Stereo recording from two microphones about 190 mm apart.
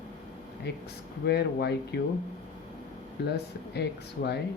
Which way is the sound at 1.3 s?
60° left (ahead or behind).